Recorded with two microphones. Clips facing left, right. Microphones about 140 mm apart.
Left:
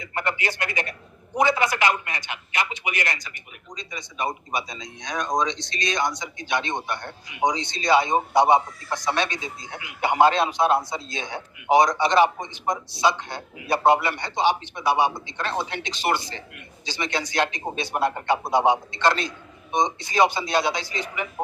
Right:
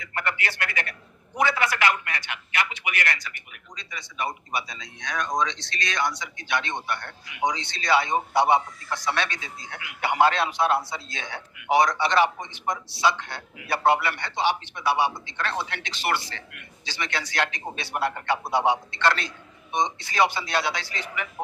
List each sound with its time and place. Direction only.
0.0 s a man's voice: 20° left (ahead or behind)